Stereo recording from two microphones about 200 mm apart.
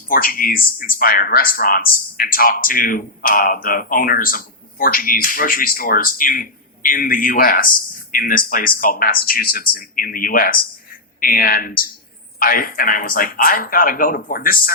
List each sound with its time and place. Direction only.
0.1 s speech: 45° left (ahead or behind)